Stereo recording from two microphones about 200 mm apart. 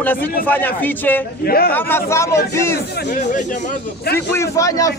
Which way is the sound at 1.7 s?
10° left (ahead or behind).